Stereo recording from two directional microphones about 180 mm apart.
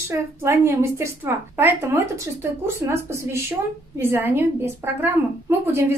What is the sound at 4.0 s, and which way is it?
A woman's voice, 10° right (ahead or behind).